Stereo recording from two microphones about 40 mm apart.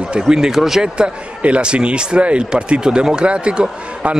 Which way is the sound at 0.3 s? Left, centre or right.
Centre.